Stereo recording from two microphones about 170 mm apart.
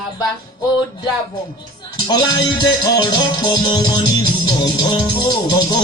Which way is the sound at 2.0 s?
25° left (ahead or behind).